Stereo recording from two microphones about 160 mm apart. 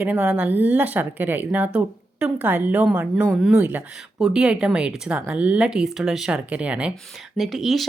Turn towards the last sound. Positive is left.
turn(degrees=0)  # may be behind; listen again after turning